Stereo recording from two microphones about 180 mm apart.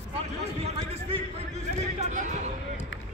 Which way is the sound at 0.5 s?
35° right (ahead or behind).